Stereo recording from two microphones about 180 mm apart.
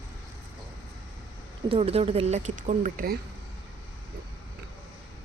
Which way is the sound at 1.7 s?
35° right (ahead or behind).